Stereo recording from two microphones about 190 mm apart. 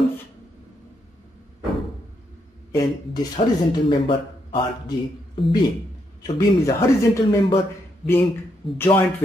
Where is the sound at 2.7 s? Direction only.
20° left (ahead or behind).